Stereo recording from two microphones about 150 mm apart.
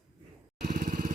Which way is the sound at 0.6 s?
90° right.